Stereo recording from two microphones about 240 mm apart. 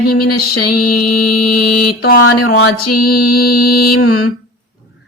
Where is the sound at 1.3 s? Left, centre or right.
Left.